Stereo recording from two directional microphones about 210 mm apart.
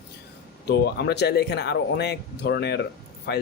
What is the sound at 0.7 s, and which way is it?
Speech, 50° left (ahead or behind).